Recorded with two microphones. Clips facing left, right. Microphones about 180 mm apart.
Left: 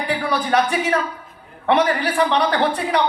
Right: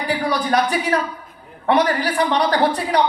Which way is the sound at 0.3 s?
35° right (ahead or behind).